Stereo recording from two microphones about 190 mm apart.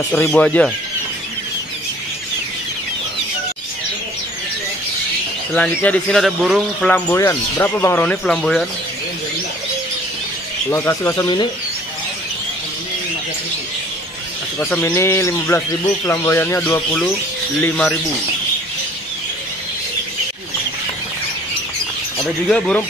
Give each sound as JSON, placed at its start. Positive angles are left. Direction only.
{"t": 0.3, "sound": "speech", "side_deg": 5}
{"t": 5.5, "sound": "speech", "side_deg": 5}
{"t": 6.9, "sound": "speech", "side_deg": 15}
{"t": 10.7, "sound": "speech", "side_deg": 15}
{"t": 14.6, "sound": "speech", "side_deg": 10}
{"t": 22.2, "sound": "speech", "side_deg": 5}